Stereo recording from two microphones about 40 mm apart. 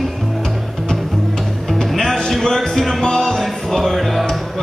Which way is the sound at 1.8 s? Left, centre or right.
Centre.